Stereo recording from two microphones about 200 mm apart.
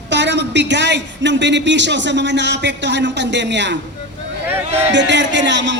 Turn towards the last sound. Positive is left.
turn(degrees=-60)  # may be behind; listen again after turning